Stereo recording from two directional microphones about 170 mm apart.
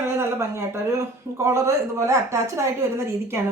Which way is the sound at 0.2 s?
15° right (ahead or behind).